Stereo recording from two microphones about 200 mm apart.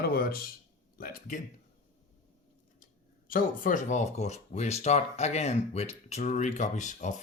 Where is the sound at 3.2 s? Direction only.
45° left (ahead or behind).